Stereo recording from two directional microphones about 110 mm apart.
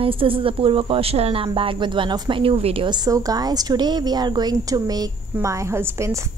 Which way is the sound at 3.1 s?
35° right (ahead or behind).